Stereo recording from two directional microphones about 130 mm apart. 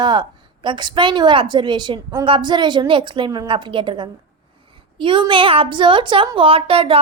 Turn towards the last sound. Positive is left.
turn(degrees=-45)  # may be behind; listen again after turning